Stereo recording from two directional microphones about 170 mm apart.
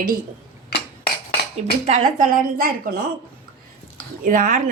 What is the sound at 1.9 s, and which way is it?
A woman's voice, 50° right (ahead or behind).